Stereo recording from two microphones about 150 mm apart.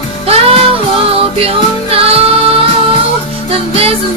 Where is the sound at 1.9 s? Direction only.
40° right (ahead or behind).